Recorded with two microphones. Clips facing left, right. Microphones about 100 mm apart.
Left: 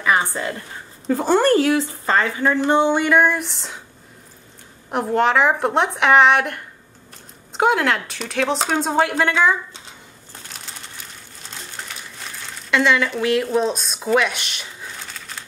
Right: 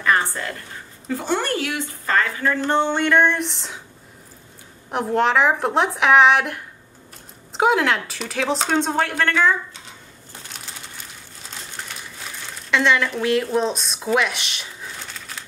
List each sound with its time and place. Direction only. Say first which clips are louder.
0.0 s a sound: left 1 dB; 10° left (ahead or behind)
1.0 s speech: left 7 dB; 40° left (ahead or behind)
2.0 s speech: left 1 dB; 20° left (ahead or behind); by 3.8 s centre (ahead or behind)
4.9 s a woman's voice: left 1 dB; centre (ahead or behind)
10.5 s crumpling: left 1 dB; centre (ahead or behind)